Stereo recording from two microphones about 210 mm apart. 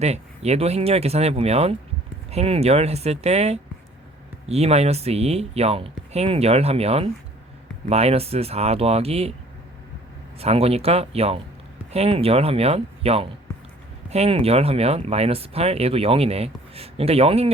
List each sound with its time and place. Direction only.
0.0 s speech: 30° right (ahead or behind)
10.4 s speech: 30° right (ahead or behind)